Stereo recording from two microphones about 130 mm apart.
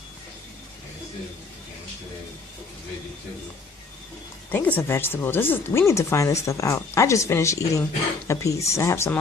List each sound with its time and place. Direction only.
4.5 s speech: 15° left (ahead or behind)